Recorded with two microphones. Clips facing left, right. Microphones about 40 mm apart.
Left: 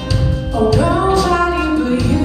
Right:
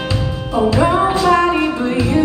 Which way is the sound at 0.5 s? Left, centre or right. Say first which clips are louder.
Right 1 dB; right.